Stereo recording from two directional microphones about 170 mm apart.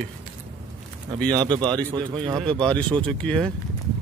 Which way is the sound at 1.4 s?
25° right (ahead or behind).